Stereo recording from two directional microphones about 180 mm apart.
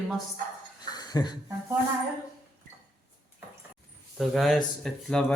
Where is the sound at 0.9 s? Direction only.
20° left (ahead or behind).